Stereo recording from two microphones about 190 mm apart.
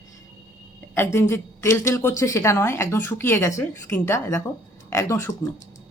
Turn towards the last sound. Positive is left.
turn(degrees=15)  # may be behind; listen again after turning